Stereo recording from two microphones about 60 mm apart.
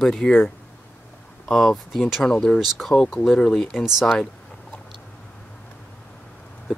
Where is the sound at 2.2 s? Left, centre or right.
Centre.